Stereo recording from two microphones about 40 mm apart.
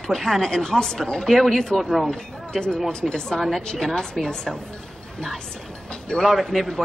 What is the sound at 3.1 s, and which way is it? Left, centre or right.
A woman's voice, centre.